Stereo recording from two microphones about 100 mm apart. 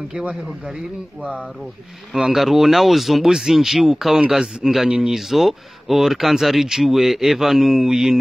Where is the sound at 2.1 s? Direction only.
5° right (ahead or behind).